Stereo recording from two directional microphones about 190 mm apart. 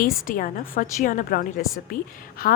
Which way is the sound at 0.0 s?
45° left (ahead or behind).